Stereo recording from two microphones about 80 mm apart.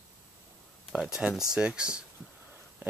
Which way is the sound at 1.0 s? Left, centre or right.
Centre.